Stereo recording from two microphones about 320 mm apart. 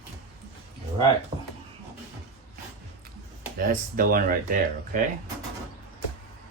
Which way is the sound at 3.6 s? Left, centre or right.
Right.